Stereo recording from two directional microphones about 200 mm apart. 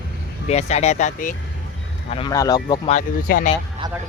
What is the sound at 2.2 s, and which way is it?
Speech, 20° left (ahead or behind).